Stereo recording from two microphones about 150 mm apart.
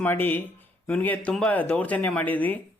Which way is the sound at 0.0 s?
15° left (ahead or behind).